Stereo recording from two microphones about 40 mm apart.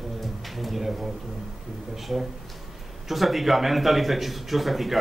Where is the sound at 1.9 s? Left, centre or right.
Centre.